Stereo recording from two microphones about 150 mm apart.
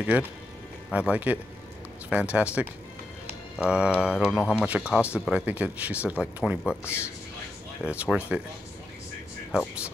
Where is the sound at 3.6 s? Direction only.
5° right (ahead or behind).